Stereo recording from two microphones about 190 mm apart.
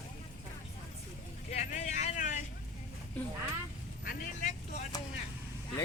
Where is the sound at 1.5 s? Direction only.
35° left (ahead or behind).